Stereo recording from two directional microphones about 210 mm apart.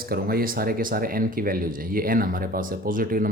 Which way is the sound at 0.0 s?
45° right (ahead or behind).